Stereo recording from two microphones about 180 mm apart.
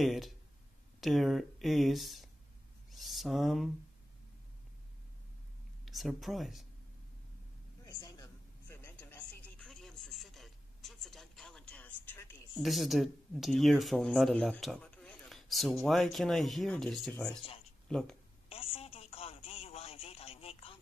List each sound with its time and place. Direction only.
0.0 s speech: centre (ahead or behind)
5.9 s speech: centre (ahead or behind)
8.0 s a sound: 15° left (ahead or behind)
12.5 s speech: centre (ahead or behind)
18.5 s telephone: 30° left (ahead or behind)